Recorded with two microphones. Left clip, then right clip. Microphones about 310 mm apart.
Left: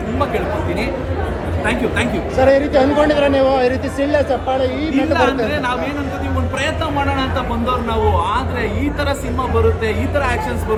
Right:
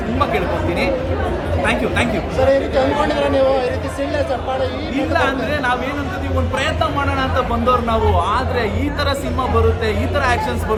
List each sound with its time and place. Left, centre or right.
2.4 s speech: left
4.9 s speech: centre
7.2 s speech: centre
9.8 s speech: centre